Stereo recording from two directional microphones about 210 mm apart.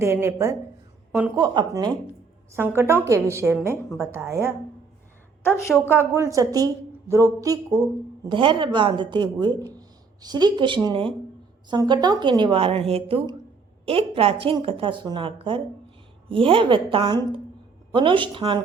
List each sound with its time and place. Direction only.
0.0 s a woman's voice: 10° right (ahead or behind)
5.4 s a woman's voice: 10° left (ahead or behind)
5.9 s a woman's voice: 10° right (ahead or behind)